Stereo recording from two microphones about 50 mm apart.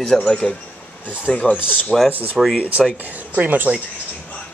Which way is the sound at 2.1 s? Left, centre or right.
Right.